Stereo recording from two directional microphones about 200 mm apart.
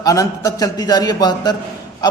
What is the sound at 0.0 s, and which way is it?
A man's voice, 15° left (ahead or behind).